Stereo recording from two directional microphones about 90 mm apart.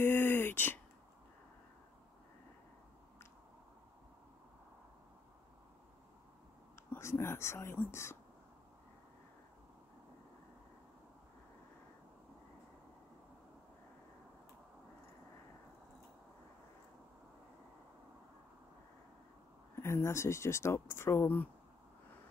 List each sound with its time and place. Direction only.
0.0 s a sound: 20° left (ahead or behind)
6.9 s speech: 30° left (ahead or behind)
19.7 s speech: 30° left (ahead or behind)